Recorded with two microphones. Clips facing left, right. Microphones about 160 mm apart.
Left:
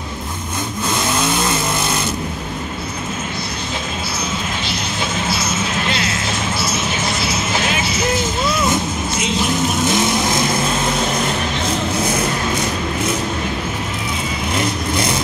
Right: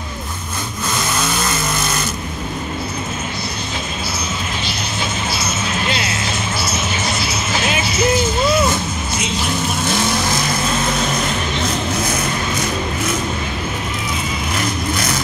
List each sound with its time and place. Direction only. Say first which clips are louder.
1.1 s vehicle: left 2 dB; 20° left (ahead or behind)
9.8 s vehicle: even; 20° left (ahead or behind)
14.5 s vehicle: left 2 dB; 25° left (ahead or behind)